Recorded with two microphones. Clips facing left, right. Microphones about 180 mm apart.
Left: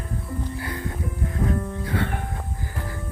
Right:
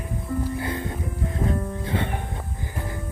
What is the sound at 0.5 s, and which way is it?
Music, 25° right (ahead or behind).